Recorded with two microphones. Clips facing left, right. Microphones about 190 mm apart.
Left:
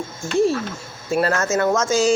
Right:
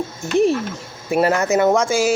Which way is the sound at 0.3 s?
20° right (ahead or behind).